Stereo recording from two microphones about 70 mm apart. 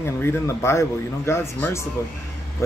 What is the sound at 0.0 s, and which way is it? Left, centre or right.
Speech, left.